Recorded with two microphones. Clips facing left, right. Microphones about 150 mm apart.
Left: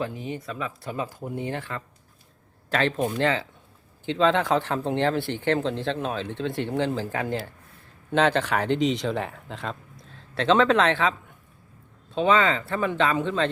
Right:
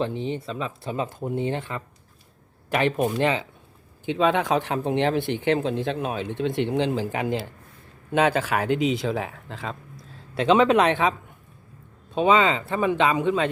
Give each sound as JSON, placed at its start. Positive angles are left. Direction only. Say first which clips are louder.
{"t": 0.0, "sound": "speech", "louder": "right 4 dB", "side_deg": -25}
{"t": 10.3, "sound": "speech", "louder": "right 2 dB", "side_deg": -15}
{"t": 12.1, "sound": "speech", "louder": "right 2 dB", "side_deg": -15}